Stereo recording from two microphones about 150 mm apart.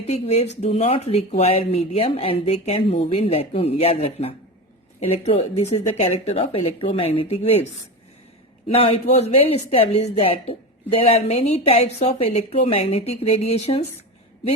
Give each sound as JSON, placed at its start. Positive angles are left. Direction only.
{"t": 0.1, "sound": "speech", "side_deg": 45}
{"t": 8.7, "sound": "speech", "side_deg": 40}